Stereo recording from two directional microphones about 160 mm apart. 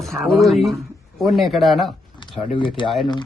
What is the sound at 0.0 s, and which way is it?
Speech, centre (ahead or behind).